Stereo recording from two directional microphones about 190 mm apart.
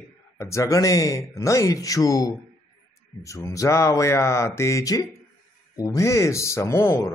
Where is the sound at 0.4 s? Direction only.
15° left (ahead or behind).